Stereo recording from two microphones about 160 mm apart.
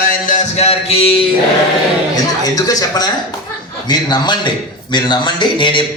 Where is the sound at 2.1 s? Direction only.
25° left (ahead or behind).